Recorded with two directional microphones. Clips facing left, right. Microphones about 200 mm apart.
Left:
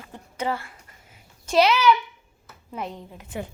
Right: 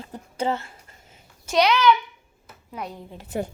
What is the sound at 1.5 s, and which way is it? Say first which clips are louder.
A child's voice: even; 5° left (ahead or behind).